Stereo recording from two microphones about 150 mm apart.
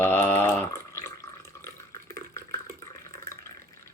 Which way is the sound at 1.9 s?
20° left (ahead or behind).